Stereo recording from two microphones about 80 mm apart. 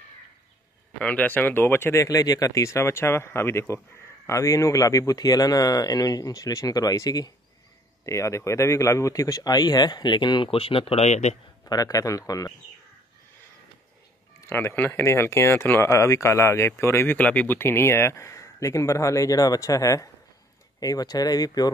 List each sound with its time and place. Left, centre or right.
0.9 s speech: centre
2.0 s speech: left
8.0 s speech: left
11.7 s speech: left
14.5 s speech: left
17.2 s speech: centre
17.6 s speech: left